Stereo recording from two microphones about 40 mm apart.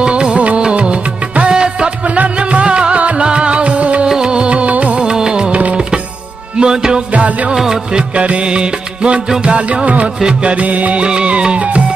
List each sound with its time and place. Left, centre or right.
0.0 s music: right
1.5 s music: centre
2.1 s music: right
4.1 s music: right
4.9 s music: centre
6.6 s music: centre
7.2 s music: right